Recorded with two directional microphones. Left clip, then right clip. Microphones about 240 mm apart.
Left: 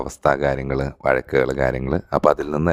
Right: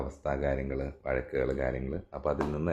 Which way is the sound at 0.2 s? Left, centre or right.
Left.